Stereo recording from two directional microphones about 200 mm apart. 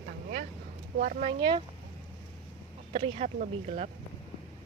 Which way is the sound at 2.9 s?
30° right (ahead or behind).